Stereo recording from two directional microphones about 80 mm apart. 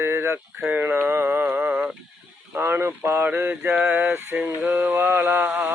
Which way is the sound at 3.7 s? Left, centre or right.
Centre.